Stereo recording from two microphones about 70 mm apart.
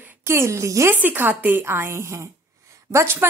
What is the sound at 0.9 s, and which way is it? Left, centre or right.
A woman's voice, right.